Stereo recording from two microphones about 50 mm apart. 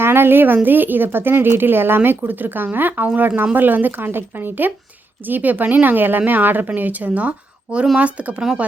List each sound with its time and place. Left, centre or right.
0.0 s a woman's voice: right
2.0 s a woman's voice: right